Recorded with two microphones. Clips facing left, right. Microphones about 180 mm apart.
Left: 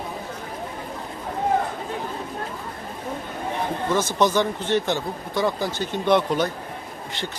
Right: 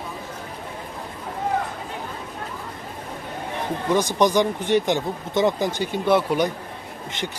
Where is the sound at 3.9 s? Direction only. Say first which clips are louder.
Right 2 dB; 15° right (ahead or behind).